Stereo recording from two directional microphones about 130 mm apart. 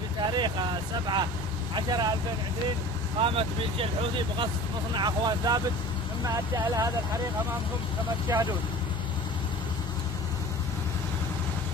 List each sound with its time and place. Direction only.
0.3 s vehicle: 35° right (ahead or behind)
1.8 s speech: 30° right (ahead or behind)
3.2 s speech: 45° right (ahead or behind)
4.9 s speech: 35° right (ahead or behind)
8.3 s speech: 25° right (ahead or behind)